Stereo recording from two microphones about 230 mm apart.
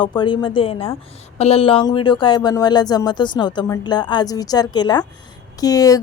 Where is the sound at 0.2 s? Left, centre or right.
Left.